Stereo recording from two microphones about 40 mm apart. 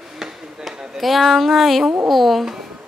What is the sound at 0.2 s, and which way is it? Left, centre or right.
Chop, centre.